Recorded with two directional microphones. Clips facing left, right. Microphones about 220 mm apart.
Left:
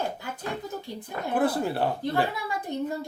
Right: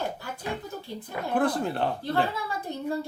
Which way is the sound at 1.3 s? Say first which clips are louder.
Left 1 dB; 5° left (ahead or behind).